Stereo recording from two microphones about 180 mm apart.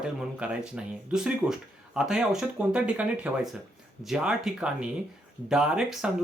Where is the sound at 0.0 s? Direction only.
5° right (ahead or behind).